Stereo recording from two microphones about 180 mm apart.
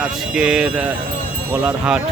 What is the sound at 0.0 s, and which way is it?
Speech, 5° right (ahead or behind).